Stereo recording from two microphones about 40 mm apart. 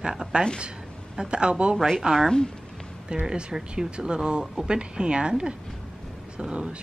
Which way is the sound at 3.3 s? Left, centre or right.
Centre.